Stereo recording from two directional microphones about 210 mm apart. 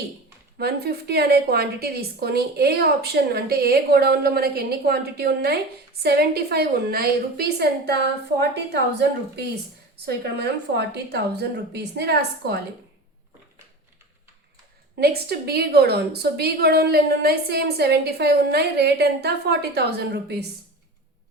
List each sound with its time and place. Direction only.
0.6 s a woman's voice: 50° right (ahead or behind)
10.1 s a woman's voice: 50° right (ahead or behind)
14.9 s a woman's voice: 50° right (ahead or behind)